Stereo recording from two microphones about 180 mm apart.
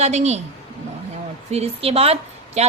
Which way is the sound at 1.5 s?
35° right (ahead or behind).